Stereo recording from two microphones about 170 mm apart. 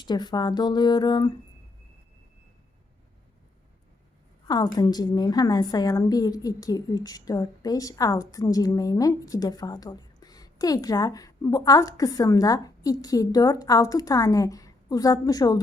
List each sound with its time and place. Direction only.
0.0 s a woman's voice: 25° left (ahead or behind)
4.4 s a woman's voice: 25° left (ahead or behind)